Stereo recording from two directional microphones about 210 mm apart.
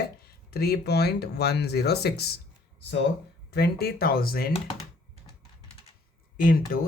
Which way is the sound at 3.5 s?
50° left (ahead or behind).